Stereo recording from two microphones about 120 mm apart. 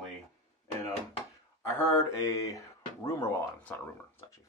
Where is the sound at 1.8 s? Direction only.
25° left (ahead or behind).